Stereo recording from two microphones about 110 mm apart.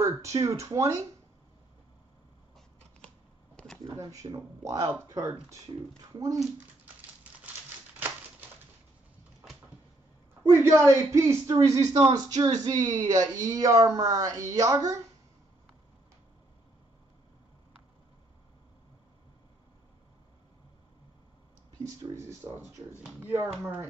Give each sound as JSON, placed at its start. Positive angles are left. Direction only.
{"t": 0.0, "sound": "speech", "side_deg": -30}
{"t": 3.5, "sound": "a sound", "side_deg": 10}
{"t": 3.9, "sound": "speech", "side_deg": -30}
{"t": 10.5, "sound": "a man's voice", "side_deg": -25}
{"t": 21.8, "sound": "a man's voice", "side_deg": -30}